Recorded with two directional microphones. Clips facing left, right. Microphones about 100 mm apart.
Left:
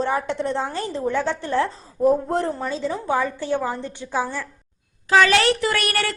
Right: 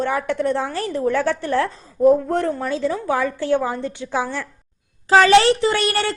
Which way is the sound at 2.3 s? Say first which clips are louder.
Right 2 dB; 30° left (ahead or behind).